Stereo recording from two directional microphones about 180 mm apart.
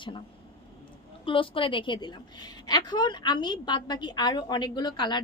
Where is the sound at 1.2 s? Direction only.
30° left (ahead or behind).